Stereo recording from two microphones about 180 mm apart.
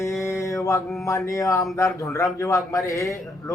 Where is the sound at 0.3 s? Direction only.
15° left (ahead or behind).